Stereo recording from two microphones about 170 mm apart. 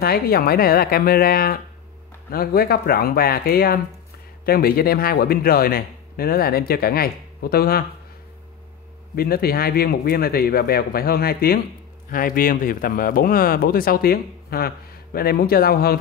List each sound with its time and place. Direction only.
0.0 s speech: 60° left (ahead or behind)
9.1 s speech: 65° left (ahead or behind)